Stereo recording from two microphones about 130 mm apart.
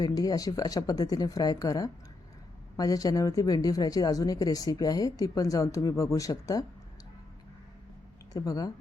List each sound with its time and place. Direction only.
0.0 s speech: 30° left (ahead or behind)
8.3 s speech: 30° left (ahead or behind)